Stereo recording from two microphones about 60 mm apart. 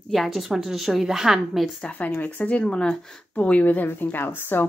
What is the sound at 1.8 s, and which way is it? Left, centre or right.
Speech, left.